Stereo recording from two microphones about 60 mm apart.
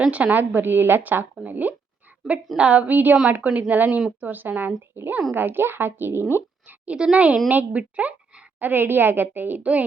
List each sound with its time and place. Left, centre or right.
0.1 s a woman's voice: right
6.7 s a woman's voice: centre